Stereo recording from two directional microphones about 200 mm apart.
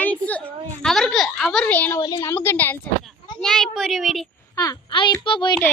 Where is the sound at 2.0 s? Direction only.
20° left (ahead or behind); by 4.2 s centre (ahead or behind).